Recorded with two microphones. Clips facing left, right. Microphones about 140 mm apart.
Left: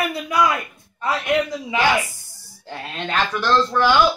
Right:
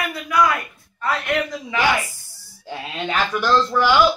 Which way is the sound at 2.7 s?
5° right (ahead or behind).